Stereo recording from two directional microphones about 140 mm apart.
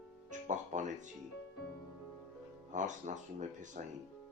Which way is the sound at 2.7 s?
60° right (ahead or behind).